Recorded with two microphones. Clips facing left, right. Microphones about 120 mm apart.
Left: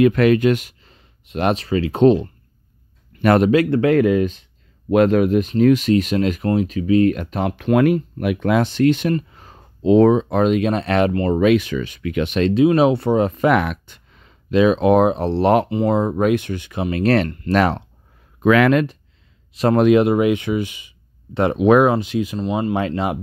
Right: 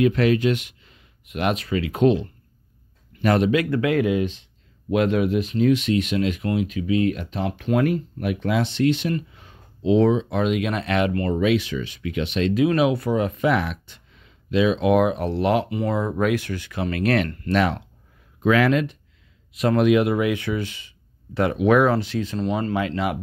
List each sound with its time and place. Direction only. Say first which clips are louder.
0.0 s speech: left 5 dB; 60° left (ahead or behind); by 2.1 s 30° left (ahead or behind)
3.2 s speech: left 5 dB; 60° left (ahead or behind)
3.4 s speech: left 5 dB; 40° left (ahead or behind); by 8.4 s 90° left
8.4 s speech: left 5 dB; 50° left (ahead or behind)
11.3 s speech: left 6 dB; 50° left (ahead or behind)
12.5 s speech: left 5 dB; 30° left (ahead or behind)
13.4 s speech: left 5 dB; 55° left (ahead or behind)
18.4 s speech: left 4 dB; 65° left (ahead or behind)
19.5 s speech: left 4 dB; 35° left (ahead or behind); by 22.8 s 15° left (ahead or behind)
22.8 s speech: left 3 dB; 30° left (ahead or behind)